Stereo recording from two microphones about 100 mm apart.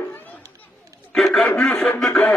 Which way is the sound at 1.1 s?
5° left (ahead or behind).